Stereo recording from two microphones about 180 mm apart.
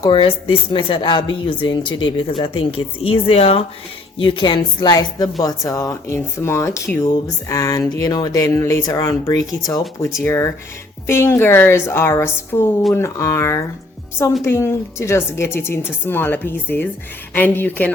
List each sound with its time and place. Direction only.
0.0 s a woman's voice: 25° left (ahead or behind); by 17.9 s 10° left (ahead or behind)